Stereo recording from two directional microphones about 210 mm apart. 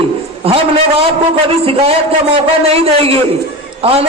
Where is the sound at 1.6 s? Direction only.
25° right (ahead or behind).